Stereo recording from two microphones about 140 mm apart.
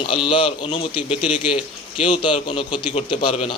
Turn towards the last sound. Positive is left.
turn(degrees=35)  # may be behind; listen again after turning